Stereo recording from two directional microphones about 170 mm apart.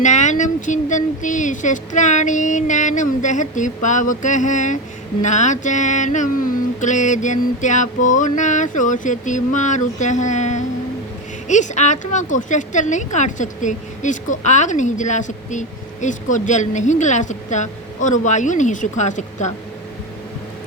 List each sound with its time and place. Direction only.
0.0 s speech: 45° left (ahead or behind)